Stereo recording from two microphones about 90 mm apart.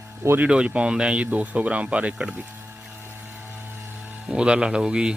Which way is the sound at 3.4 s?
20° right (ahead or behind).